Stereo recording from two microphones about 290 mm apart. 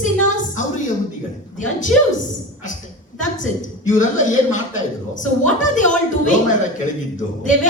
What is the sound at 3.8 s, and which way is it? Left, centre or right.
Singing, left.